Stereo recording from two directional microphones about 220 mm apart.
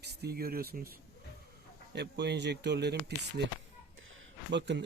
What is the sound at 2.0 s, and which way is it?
Speech, 50° right (ahead or behind).